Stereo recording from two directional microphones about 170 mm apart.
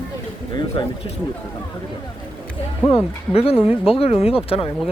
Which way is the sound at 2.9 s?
35° left (ahead or behind).